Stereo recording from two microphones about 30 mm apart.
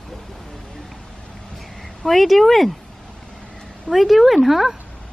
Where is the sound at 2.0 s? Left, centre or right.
Centre.